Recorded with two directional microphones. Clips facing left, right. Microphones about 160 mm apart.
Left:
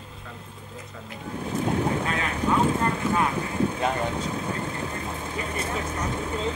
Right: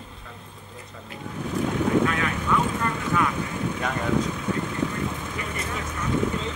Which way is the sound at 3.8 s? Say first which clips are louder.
Right 1 dB; 30° left (ahead or behind).